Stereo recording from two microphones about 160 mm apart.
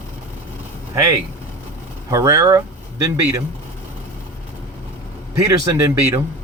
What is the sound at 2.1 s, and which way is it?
Speech, 20° right (ahead or behind).